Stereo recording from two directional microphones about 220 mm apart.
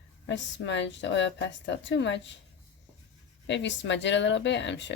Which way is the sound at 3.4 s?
55° left (ahead or behind).